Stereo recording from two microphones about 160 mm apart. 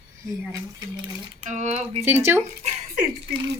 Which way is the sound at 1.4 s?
50° right (ahead or behind).